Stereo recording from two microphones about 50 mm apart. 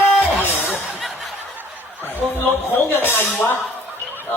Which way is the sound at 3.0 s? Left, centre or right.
Left.